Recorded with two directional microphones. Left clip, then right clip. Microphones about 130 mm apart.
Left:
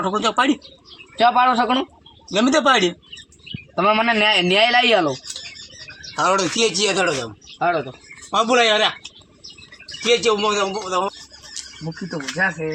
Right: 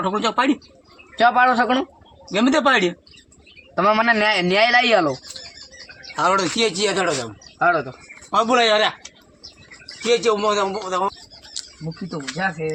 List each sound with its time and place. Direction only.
0.0 s speech: 20° right (ahead or behind)
1.2 s speech: 5° left (ahead or behind)
2.3 s speech: 20° right (ahead or behind)
3.8 s a man's voice: 5° left (ahead or behind)
6.1 s speech: 20° right (ahead or behind)
7.6 s a man's voice: 10° left (ahead or behind)
8.3 s speech: 15° right (ahead or behind)
10.0 s speech: 15° right (ahead or behind)